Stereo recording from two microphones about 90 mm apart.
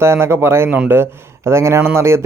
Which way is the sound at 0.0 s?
30° right (ahead or behind).